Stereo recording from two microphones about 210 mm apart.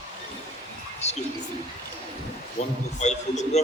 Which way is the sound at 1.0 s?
30° left (ahead or behind).